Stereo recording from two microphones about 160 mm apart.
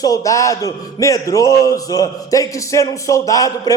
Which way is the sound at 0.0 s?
20° left (ahead or behind).